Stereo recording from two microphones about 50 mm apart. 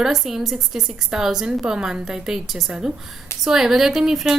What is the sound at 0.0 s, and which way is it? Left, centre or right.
A woman's voice, centre.